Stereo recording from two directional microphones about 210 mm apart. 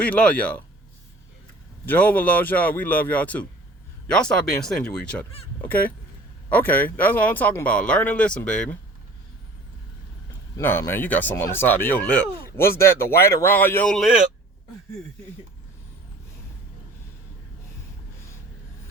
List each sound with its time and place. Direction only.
0.0 s speech: 5° left (ahead or behind)
1.9 s speech: 10° left (ahead or behind)
10.6 s speech: 10° left (ahead or behind)